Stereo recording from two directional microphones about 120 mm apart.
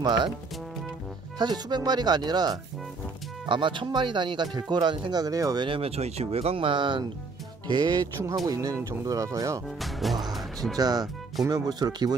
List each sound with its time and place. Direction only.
0.0 s speech: 35° right (ahead or behind)
1.4 s speech: 35° right (ahead or behind)
5.7 s speech: 55° right (ahead or behind); by 9.6 s 25° right (ahead or behind)
9.8 s speech: centre (ahead or behind)
10.8 s speech: 35° right (ahead or behind)